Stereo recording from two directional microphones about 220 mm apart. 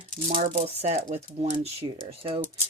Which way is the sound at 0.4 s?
30° right (ahead or behind).